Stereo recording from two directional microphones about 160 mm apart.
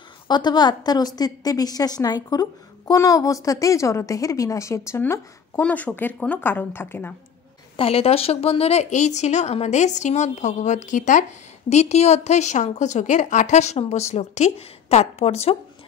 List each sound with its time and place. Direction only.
0.3 s a woman's voice: 25° left (ahead or behind)
7.7 s a woman's voice: 35° left (ahead or behind)